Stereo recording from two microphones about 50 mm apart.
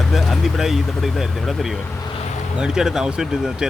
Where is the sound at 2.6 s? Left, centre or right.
Centre.